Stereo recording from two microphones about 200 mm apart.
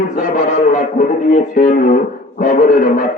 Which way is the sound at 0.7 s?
40° left (ahead or behind).